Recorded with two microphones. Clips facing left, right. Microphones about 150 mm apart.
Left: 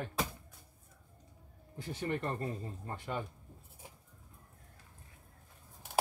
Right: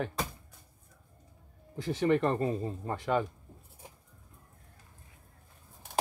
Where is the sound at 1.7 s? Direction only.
90° right.